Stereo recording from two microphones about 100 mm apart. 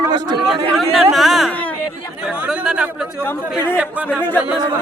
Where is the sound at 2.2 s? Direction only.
10° right (ahead or behind).